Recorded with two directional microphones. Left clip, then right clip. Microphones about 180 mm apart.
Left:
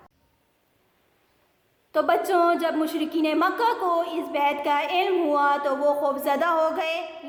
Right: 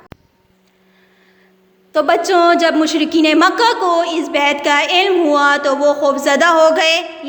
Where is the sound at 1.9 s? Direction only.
35° right (ahead or behind).